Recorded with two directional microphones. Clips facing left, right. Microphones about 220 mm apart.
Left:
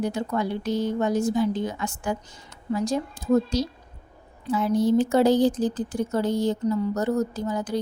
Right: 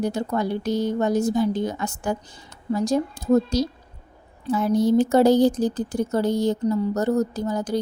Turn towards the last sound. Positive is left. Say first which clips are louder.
# right 2 dB
turn(degrees=-40)  # may be behind; listen again after turning